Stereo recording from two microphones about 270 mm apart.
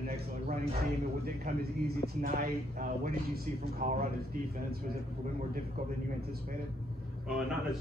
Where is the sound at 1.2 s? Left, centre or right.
Right.